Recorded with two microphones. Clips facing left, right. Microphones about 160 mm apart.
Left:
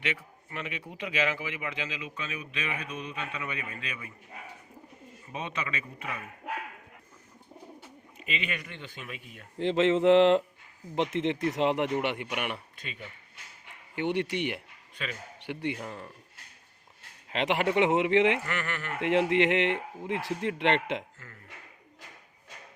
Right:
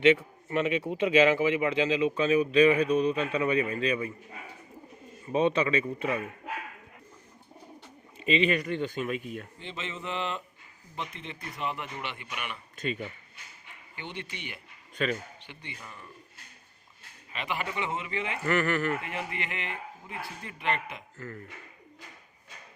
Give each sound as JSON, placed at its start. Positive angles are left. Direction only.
{"t": 0.0, "sound": "a man's voice", "side_deg": -25}
{"t": 5.3, "sound": "a man's voice", "side_deg": -30}
{"t": 8.2, "sound": "speech", "side_deg": -30}
{"t": 9.6, "sound": "a man's voice", "side_deg": 90}
{"t": 12.7, "sound": "speech", "side_deg": -45}
{"t": 13.9, "sound": "a man's voice", "side_deg": 65}
{"t": 14.9, "sound": "speech", "side_deg": -45}
{"t": 15.4, "sound": "a man's voice", "side_deg": 70}
{"t": 17.3, "sound": "a man's voice", "side_deg": 80}
{"t": 18.4, "sound": "a man's voice", "side_deg": -40}
{"t": 18.9, "sound": "a man's voice", "side_deg": 75}
{"t": 21.2, "sound": "speech", "side_deg": -45}